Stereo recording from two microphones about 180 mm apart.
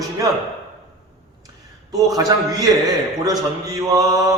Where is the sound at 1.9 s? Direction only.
20° right (ahead or behind).